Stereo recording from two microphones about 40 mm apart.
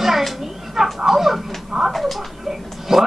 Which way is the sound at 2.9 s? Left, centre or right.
Centre.